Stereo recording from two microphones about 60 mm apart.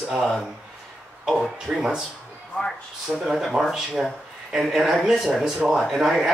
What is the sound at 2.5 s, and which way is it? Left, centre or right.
Speech, centre.